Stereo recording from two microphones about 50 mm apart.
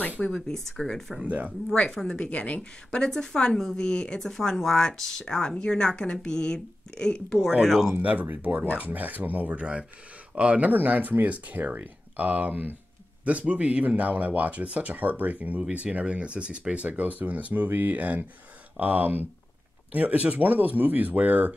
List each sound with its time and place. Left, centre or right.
0.3 s a woman's voice: centre
1.2 s speech: right
2.0 s speech: left
3.0 s a woman's voice: centre
7.6 s speech: centre
8.0 s speech: right